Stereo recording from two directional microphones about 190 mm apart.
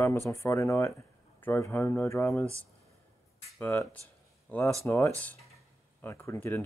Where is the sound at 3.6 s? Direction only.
10° left (ahead or behind).